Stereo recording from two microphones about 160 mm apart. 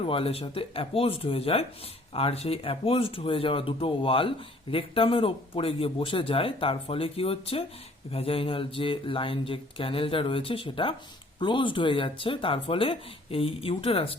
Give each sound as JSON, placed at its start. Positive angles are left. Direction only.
{"t": 0.0, "sound": "speech", "side_deg": 35}